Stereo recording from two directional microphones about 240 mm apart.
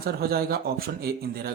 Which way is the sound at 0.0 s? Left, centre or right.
Right.